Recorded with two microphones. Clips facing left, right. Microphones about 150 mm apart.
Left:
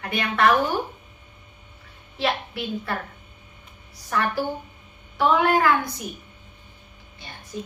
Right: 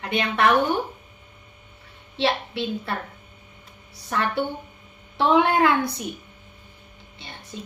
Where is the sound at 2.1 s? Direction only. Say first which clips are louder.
Right 2 dB; 25° right (ahead or behind).